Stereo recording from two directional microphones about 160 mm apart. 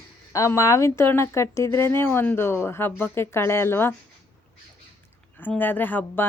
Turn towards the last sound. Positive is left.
turn(degrees=10)  # may be behind; listen again after turning